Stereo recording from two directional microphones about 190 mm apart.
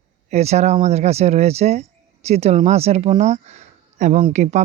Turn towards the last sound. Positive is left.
turn(degrees=-35)  # may be behind; listen again after turning